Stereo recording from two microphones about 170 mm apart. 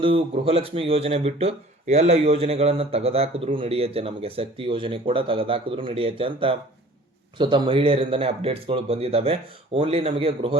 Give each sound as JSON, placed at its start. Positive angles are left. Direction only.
{"t": 0.0, "sound": "speech", "side_deg": -30}